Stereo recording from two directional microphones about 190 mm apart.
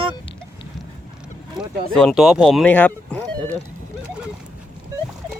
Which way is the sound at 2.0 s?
Centre (ahead or behind).